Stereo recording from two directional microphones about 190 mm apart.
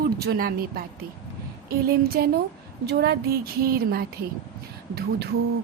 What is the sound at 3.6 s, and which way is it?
Speech, 50° right (ahead or behind).